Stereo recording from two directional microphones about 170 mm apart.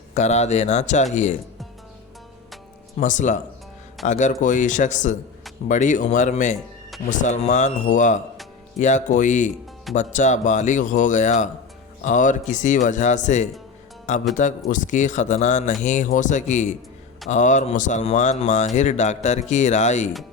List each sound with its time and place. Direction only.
0.1 s speech: 45° left (ahead or behind)
3.0 s speech: 45° left (ahead or behind)